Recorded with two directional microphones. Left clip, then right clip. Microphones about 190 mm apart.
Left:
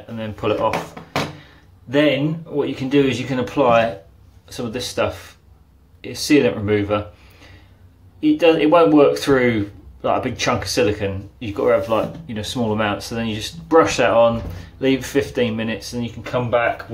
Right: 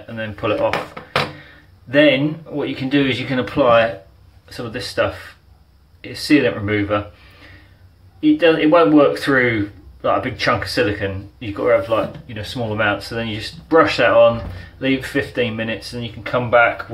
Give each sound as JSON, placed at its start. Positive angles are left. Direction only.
{"t": 0.1, "sound": "speech", "side_deg": 0}
{"t": 1.9, "sound": "speech", "side_deg": 0}
{"t": 8.2, "sound": "speech", "side_deg": 5}